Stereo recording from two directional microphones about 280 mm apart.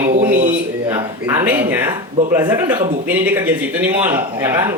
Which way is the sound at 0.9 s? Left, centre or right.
Centre.